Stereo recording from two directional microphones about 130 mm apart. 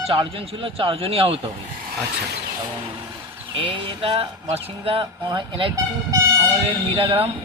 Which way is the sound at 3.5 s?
45° right (ahead or behind).